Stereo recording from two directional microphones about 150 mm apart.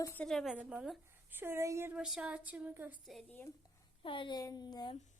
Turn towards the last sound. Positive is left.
turn(degrees=30)  # may be behind; listen again after turning